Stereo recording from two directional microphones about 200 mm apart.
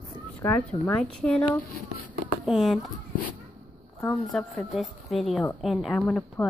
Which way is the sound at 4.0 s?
5° left (ahead or behind).